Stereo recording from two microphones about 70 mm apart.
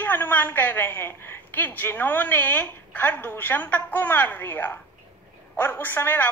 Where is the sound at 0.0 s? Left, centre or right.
Left.